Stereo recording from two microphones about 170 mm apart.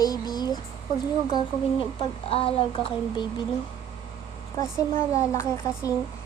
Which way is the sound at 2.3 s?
35° left (ahead or behind).